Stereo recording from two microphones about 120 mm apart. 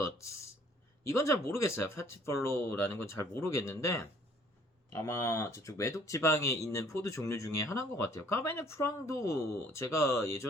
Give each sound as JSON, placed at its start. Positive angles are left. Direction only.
{"t": 1.0, "sound": "speech", "side_deg": 25}